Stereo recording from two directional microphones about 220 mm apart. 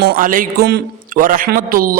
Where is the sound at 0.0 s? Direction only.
40° right (ahead or behind).